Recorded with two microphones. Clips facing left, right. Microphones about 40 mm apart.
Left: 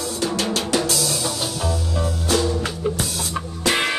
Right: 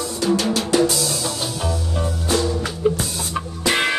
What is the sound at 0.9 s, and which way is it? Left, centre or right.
Music, centre.